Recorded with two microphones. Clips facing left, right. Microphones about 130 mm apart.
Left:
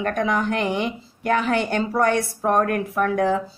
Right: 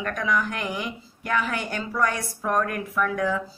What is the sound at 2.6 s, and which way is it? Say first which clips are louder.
Speech: left 5 dB; 45° left (ahead or behind).